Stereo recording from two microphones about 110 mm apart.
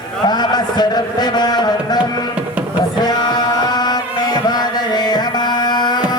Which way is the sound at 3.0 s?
40° left (ahead or behind).